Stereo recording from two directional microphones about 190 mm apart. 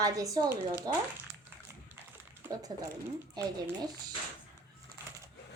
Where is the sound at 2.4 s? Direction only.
15° right (ahead or behind).